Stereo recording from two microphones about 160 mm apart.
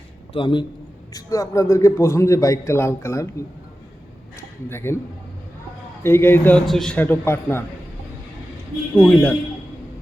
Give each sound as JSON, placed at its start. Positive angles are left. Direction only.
{"t": 0.3, "sound": "a man's voice", "side_deg": 30}
{"t": 1.1, "sound": "a man's voice", "side_deg": 20}
{"t": 4.4, "sound": "a sound", "side_deg": 15}
{"t": 6.0, "sound": "a man's voice", "side_deg": 15}
{"t": 9.0, "sound": "speech", "side_deg": 5}